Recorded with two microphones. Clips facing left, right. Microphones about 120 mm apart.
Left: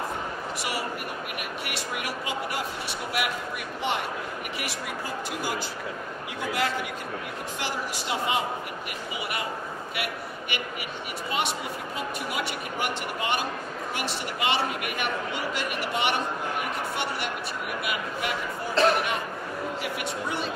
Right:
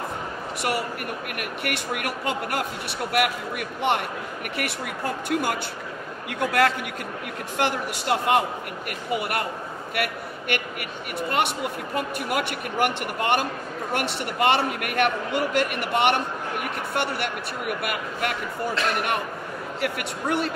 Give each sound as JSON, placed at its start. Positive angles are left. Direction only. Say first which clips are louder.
{"t": 0.6, "sound": "a man's voice", "louder": "right 7 dB", "side_deg": -55}
{"t": 18.8, "sound": "a man's voice", "louder": "left 7 dB", "side_deg": 35}
{"t": 19.8, "sound": "a man's voice", "louder": "right 3 dB", "side_deg": -65}